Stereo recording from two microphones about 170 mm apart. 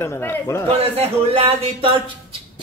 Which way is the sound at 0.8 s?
35° right (ahead or behind).